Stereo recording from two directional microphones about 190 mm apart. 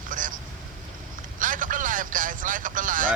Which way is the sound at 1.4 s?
45° right (ahead or behind).